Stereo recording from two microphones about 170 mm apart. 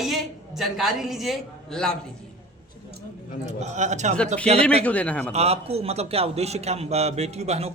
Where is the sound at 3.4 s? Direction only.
45° right (ahead or behind).